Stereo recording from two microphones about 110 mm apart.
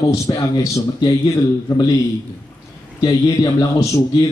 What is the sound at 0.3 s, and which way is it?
Speech, 40° left (ahead or behind).